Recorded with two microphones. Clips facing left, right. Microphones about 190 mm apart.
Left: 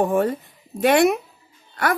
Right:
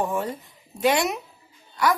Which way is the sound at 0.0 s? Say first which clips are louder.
Left 7 dB; 60° left (ahead or behind).